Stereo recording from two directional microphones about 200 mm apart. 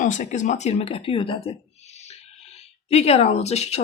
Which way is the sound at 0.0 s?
35° left (ahead or behind).